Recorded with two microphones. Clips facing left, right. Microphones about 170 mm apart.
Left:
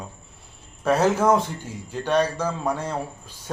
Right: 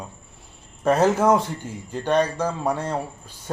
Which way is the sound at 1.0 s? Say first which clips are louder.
Right 1 dB; 10° right (ahead or behind).